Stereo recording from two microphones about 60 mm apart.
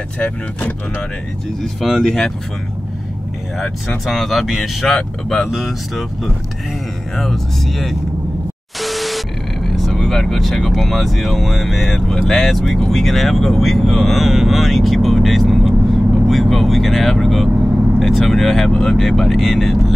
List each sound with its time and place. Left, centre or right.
0.2 s speech: left
1.8 s speech: centre
3.5 s speech: centre